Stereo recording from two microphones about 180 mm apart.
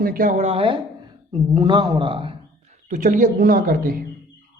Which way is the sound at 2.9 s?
45° right (ahead or behind).